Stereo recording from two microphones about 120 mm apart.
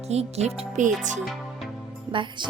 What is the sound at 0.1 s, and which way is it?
Speech, 65° right (ahead or behind).